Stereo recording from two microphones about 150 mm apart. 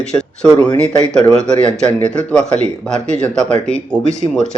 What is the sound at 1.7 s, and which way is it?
Speech, 5° left (ahead or behind).